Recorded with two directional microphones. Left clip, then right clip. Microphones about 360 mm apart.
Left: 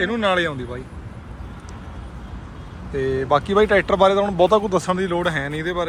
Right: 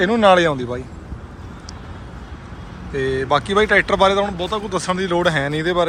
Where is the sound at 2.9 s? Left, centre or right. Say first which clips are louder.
Right 1 dB; centre.